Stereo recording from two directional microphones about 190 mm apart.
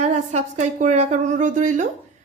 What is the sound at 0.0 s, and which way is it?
A woman's voice, 35° right (ahead or behind).